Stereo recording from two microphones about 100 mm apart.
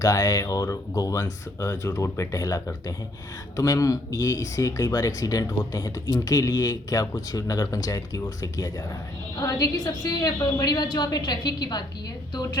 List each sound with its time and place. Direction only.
0.0 s a woman's voice: 35° left (ahead or behind)